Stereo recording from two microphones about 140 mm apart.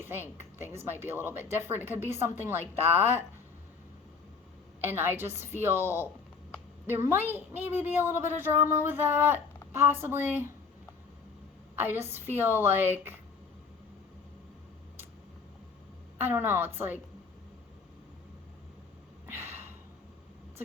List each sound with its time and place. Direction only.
0.0 s a woman's voice: 15° right (ahead or behind)
4.8 s a woman's voice: 15° right (ahead or behind)
11.8 s a woman's voice: 15° right (ahead or behind)
16.2 s a woman's voice: 15° right (ahead or behind)
19.3 s a sound: 15° right (ahead or behind)